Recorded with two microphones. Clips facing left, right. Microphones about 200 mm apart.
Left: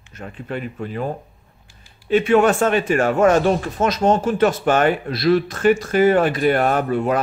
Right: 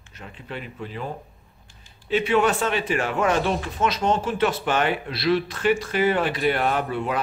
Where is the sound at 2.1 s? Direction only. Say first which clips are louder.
Left 6 dB; 50° left (ahead or behind).